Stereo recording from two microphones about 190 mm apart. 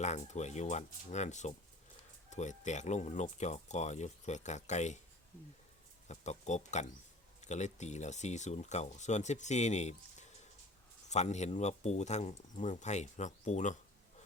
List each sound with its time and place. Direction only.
0.0 s speech: 40° left (ahead or behind)
6.1 s speech: 40° left (ahead or behind)